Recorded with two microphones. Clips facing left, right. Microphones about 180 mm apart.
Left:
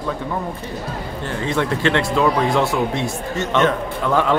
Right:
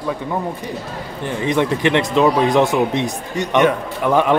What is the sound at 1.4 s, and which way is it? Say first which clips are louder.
Speech: right 3 dB; 15° right (ahead or behind).